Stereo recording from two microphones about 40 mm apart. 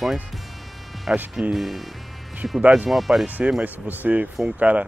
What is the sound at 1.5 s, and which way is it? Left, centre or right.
Speech, centre.